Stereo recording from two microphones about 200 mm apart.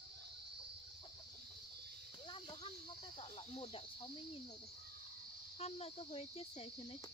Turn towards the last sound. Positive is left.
turn(degrees=30)  # may be behind; listen again after turning